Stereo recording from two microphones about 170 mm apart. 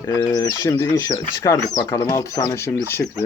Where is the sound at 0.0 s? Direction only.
20° left (ahead or behind).